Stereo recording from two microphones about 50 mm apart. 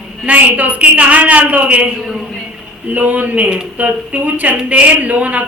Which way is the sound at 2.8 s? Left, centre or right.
Right.